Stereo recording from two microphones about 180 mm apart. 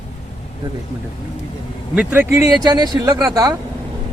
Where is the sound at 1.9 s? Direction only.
10° right (ahead or behind).